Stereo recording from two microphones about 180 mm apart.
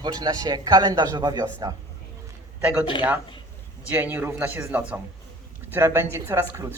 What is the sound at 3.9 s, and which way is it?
Speech, 10° right (ahead or behind).